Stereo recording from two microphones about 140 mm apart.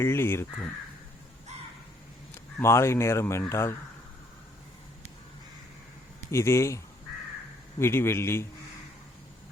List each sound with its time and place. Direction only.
0.0 s a man's voice: 15° left (ahead or behind)
2.6 s speech: 20° left (ahead or behind)
6.3 s a man's voice: 20° left (ahead or behind)